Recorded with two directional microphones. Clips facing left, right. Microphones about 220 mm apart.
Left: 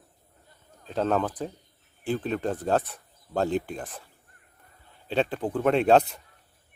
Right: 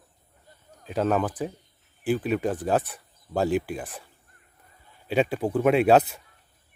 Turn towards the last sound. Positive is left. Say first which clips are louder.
# right 1 dB
turn(degrees=-5)  # may be behind; listen again after turning